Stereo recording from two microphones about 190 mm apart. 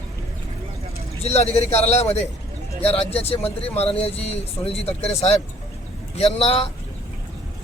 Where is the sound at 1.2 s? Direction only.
35° left (ahead or behind).